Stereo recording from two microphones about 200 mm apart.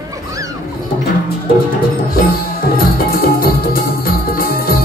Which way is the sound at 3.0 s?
50° left (ahead or behind).